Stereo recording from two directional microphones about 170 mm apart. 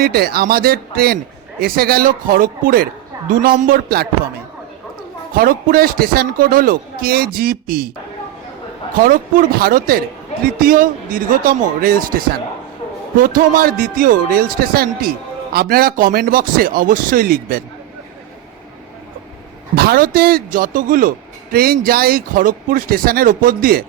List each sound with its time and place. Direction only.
0.0 s a man's voice: 65° right (ahead or behind)
5.4 s a man's voice: 60° right (ahead or behind)
9.0 s a man's voice: 55° right (ahead or behind)
19.7 s a man's voice: 65° right (ahead or behind)